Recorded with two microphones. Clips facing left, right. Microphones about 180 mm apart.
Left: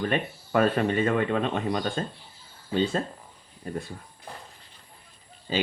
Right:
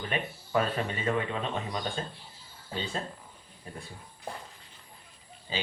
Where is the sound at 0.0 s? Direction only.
55° left (ahead or behind).